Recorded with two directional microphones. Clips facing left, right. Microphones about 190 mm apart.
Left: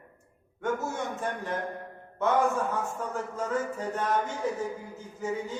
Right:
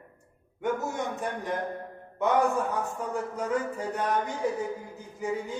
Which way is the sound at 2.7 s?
15° right (ahead or behind).